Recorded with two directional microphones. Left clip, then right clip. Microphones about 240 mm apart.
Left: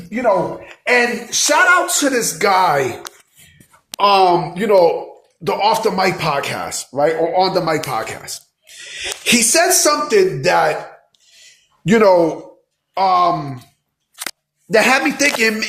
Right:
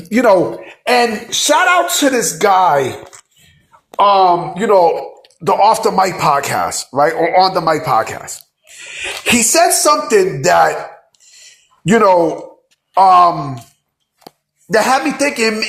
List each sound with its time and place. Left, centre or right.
0.1 s speech: right
0.9 s a sound: centre
1.5 s a man's voice: centre
3.9 s a man's voice: centre
11.9 s a man's voice: centre
14.7 s speech: centre